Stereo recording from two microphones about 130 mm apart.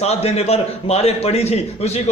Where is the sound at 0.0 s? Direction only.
55° left (ahead or behind).